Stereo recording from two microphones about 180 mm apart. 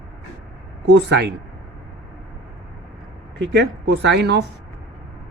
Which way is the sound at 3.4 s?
75° right (ahead or behind).